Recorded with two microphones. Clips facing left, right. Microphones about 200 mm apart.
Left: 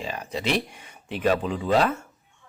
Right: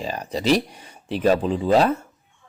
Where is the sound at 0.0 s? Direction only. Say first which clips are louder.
Right 5 dB; 40° right (ahead or behind).